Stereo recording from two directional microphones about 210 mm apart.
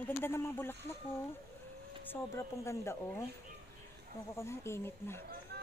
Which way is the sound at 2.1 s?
15° left (ahead or behind).